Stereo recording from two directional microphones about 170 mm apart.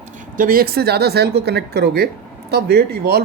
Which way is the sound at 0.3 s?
55° right (ahead or behind).